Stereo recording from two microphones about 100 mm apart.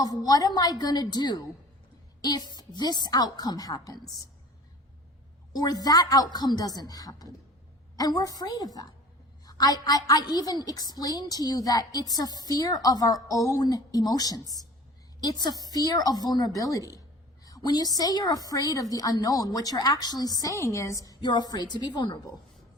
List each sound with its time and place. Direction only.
0.0 s a woman's voice: 40° left (ahead or behind)
5.5 s a woman's voice: 40° left (ahead or behind)